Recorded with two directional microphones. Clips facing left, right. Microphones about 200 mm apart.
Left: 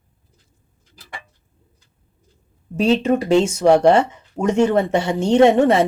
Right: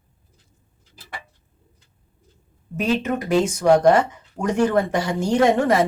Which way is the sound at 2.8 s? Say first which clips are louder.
Left 5 dB; 30° left (ahead or behind).